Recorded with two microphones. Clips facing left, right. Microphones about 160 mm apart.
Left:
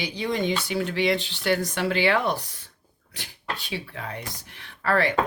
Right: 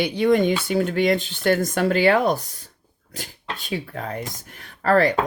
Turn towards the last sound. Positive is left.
turn(degrees=-40)  # may be behind; listen again after turning